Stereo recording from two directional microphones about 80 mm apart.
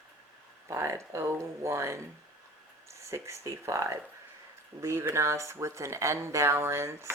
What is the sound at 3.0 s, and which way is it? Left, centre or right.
Speech, right.